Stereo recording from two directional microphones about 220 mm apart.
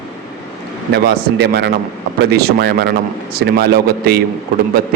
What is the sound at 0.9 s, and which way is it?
A man's voice, 50° right (ahead or behind).